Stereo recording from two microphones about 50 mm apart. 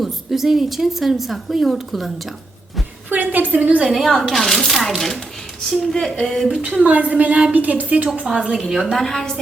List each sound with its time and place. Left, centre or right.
0.0 s a woman's voice: centre
3.1 s a sound: right
3.8 s a woman's voice: centre
6.6 s a woman's voice: right
8.5 s a woman's voice: centre